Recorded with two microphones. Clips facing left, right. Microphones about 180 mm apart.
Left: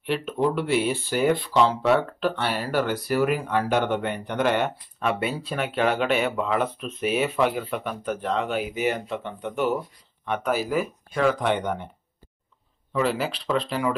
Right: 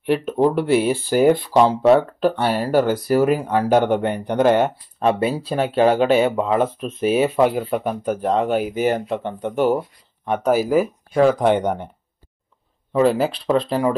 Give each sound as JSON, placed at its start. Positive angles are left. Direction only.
{"t": 0.0, "sound": "speech", "side_deg": -40}
{"t": 12.9, "sound": "speech", "side_deg": -40}